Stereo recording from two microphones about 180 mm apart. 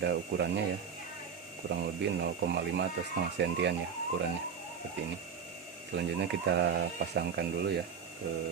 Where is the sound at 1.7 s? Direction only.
70° right (ahead or behind).